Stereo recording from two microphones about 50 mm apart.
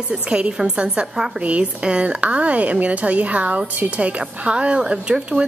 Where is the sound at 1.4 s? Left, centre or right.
Right.